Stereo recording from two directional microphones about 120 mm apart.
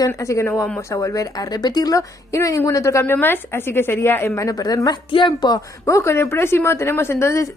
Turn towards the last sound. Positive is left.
turn(degrees=25)  # may be behind; listen again after turning